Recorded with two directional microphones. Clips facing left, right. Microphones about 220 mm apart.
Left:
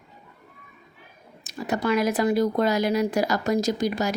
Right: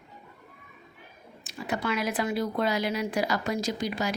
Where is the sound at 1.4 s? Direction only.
40° left (ahead or behind).